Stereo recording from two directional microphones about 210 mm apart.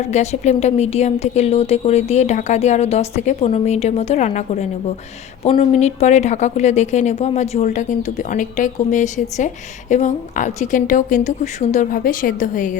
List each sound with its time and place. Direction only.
0.1 s speech: 30° left (ahead or behind)